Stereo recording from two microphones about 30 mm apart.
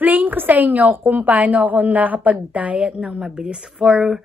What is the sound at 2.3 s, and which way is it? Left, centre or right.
Speech, right.